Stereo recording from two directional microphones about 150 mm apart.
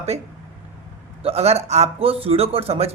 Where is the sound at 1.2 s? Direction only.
45° right (ahead or behind).